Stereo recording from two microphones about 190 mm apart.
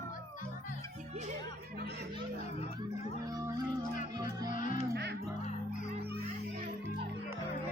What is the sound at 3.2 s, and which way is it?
Music, 20° right (ahead or behind).